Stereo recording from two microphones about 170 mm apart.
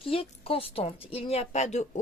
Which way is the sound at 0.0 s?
35° left (ahead or behind).